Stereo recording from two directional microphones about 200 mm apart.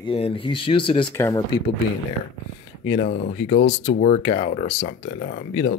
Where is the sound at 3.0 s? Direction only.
55° left (ahead or behind).